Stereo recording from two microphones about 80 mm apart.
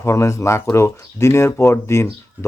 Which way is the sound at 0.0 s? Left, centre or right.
Left.